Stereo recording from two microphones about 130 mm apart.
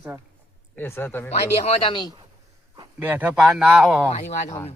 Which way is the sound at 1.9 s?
35° left (ahead or behind).